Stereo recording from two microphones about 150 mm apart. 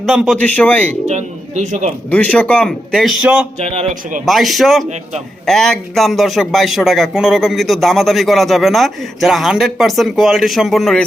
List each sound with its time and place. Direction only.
0.0 s a man's voice: centre (ahead or behind)
0.3 s a man's voice: 10° left (ahead or behind)
1.0 s speech: 50° right (ahead or behind)
2.0 s a man's voice: 10° left (ahead or behind)